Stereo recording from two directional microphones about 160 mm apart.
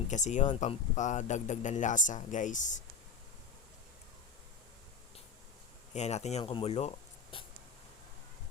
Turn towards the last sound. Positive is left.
turn(degrees=35)  # may be behind; listen again after turning